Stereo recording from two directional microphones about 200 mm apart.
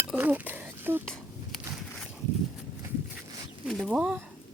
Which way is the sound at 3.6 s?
Centre (ahead or behind).